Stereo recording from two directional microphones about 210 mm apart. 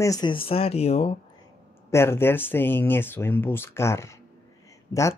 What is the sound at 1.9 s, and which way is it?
Speech, 10° left (ahead or behind).